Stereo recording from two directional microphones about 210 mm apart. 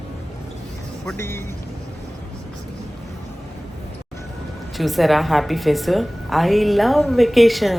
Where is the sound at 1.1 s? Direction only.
10° left (ahead or behind).